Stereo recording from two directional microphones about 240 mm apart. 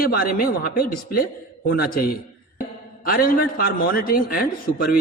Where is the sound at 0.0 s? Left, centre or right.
Left.